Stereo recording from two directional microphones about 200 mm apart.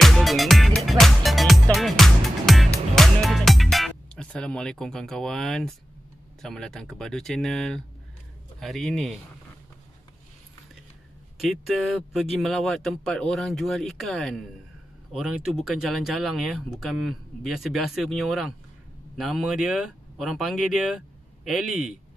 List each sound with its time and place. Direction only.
0.0 s music: centre (ahead or behind)
6.4 s speech: centre (ahead or behind)
11.3 s speech: centre (ahead or behind)